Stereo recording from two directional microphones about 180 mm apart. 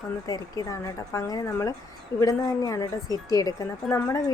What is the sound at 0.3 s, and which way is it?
Speech, 20° left (ahead or behind).